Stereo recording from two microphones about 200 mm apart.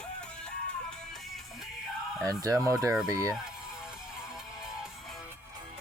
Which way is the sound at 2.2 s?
15° right (ahead or behind).